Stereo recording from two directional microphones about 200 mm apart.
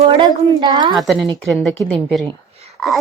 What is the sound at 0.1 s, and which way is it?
Speech, 25° right (ahead or behind).